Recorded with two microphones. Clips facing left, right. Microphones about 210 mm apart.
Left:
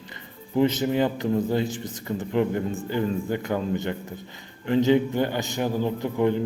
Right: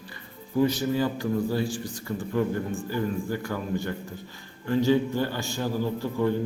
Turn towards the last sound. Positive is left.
turn(degrees=20)  # may be behind; listen again after turning